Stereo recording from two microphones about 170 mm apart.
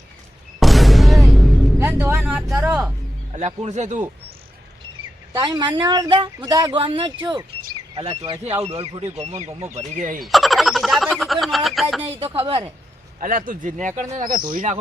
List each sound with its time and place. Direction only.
0.6 s music: centre (ahead or behind)
1.8 s speech: 15° right (ahead or behind)
3.3 s speech: 45° right (ahead or behind)
5.3 s a woman's voice: 25° right (ahead or behind)
9.5 s speech: 15° right (ahead or behind)
9.7 s speech: 50° right (ahead or behind)
10.2 s speech: centre (ahead or behind)
12.2 s a woman's voice: 35° right (ahead or behind)
13.1 s speech: 55° right (ahead or behind)